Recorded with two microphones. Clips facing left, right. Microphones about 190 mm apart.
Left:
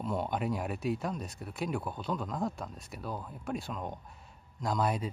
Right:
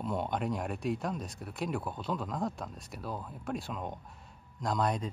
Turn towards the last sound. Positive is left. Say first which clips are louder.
# even
turn(degrees=5)  # may be behind; listen again after turning